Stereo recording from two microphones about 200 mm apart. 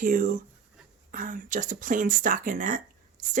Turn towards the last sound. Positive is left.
turn(degrees=-40)  # may be behind; listen again after turning